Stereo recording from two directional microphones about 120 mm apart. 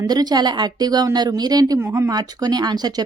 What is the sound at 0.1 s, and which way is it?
A woman's voice, 35° right (ahead or behind).